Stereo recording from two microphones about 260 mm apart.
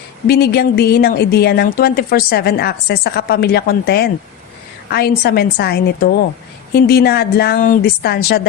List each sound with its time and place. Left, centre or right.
0.3 s speech: left